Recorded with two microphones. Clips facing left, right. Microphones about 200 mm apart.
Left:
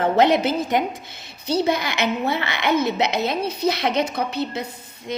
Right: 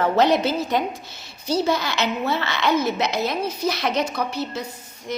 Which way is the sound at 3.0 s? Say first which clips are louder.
Left 1 dB; 60° left (ahead or behind).